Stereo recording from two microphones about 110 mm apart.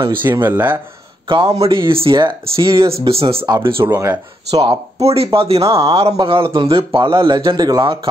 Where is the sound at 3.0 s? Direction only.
60° right (ahead or behind).